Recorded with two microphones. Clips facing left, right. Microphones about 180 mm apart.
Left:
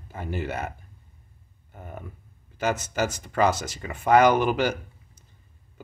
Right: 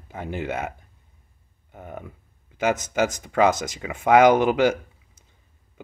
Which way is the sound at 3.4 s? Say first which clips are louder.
Right 3 dB; 15° right (ahead or behind).